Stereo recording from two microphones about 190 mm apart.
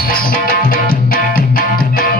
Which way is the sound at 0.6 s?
45° left (ahead or behind).